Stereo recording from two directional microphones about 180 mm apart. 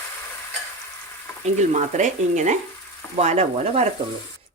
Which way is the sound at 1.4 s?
40° right (ahead or behind).